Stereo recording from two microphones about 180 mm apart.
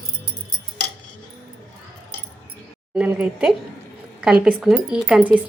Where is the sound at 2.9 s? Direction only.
5° right (ahead or behind).